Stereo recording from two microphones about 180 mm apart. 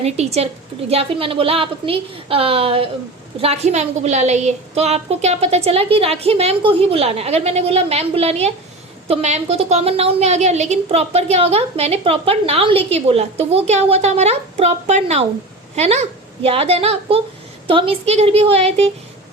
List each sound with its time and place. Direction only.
0.0 s a woman's voice: 35° right (ahead or behind)